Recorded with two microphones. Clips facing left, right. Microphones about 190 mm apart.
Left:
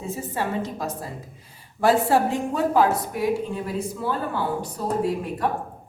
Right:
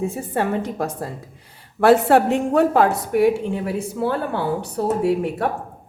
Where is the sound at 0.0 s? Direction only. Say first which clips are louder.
Right 6 dB; 60° right (ahead or behind).